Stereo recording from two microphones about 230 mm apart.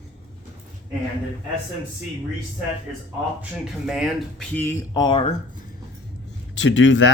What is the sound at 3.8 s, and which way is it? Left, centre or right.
Speech, centre.